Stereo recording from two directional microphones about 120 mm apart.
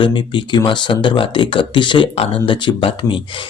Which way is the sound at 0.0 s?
40° left (ahead or behind).